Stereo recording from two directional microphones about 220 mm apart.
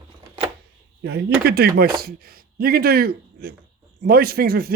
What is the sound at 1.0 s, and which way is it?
Speech, 45° right (ahead or behind).